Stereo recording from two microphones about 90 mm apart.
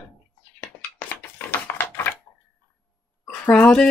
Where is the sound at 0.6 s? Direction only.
15° left (ahead or behind).